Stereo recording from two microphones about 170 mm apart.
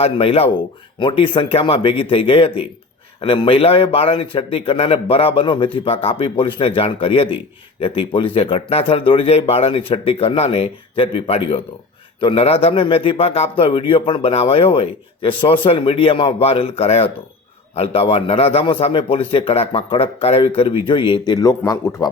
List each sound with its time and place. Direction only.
0.0 s a man's voice: 35° left (ahead or behind); by 22.1 s 20° left (ahead or behind)